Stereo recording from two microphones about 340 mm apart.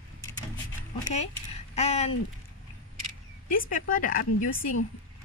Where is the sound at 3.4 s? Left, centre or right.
Left.